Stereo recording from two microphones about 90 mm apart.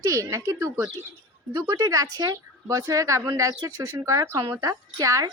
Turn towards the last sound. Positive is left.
turn(degrees=-40)  # may be behind; listen again after turning